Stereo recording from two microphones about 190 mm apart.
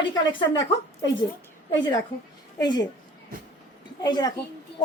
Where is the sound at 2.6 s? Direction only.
20° left (ahead or behind).